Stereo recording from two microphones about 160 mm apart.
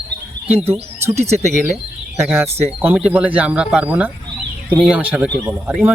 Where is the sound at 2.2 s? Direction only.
5° right (ahead or behind).